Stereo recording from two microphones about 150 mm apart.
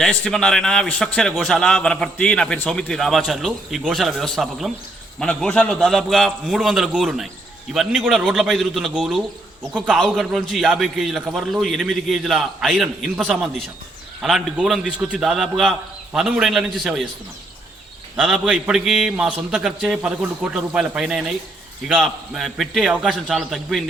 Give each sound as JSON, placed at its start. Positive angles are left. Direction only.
{"t": 0.0, "sound": "a man's voice", "side_deg": 5}
{"t": 18.2, "sound": "a man's voice", "side_deg": -5}